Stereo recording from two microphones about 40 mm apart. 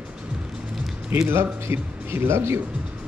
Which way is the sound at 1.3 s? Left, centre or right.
Right.